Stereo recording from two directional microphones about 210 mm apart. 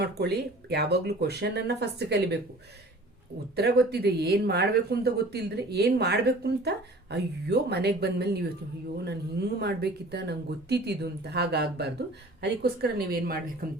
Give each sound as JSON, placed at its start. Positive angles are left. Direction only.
{"t": 0.0, "sound": "speech", "side_deg": -50}
{"t": 3.5, "sound": "speech", "side_deg": -50}